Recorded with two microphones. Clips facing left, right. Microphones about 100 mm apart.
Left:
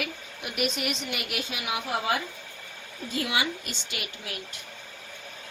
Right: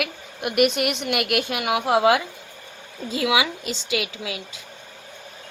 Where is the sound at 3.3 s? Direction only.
90° right.